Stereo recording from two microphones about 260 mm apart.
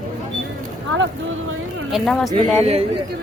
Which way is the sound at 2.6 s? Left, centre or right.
Right.